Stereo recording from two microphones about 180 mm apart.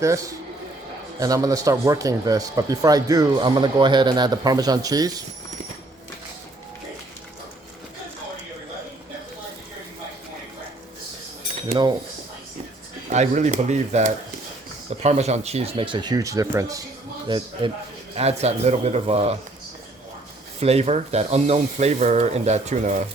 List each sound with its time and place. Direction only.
1.2 s speech: 20° right (ahead or behind)
13.1 s speech: 40° right (ahead or behind)
20.6 s speech: 35° right (ahead or behind)